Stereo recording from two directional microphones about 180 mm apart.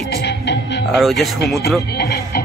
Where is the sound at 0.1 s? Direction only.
70° left (ahead or behind).